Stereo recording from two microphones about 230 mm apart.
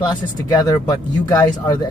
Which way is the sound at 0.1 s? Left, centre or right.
Centre.